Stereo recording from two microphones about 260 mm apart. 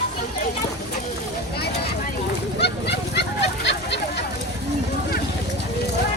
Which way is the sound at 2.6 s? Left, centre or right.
Left.